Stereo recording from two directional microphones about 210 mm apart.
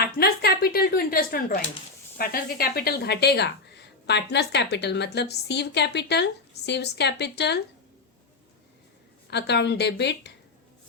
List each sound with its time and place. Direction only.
0.0 s speech: 45° left (ahead or behind)
9.3 s speech: 55° left (ahead or behind)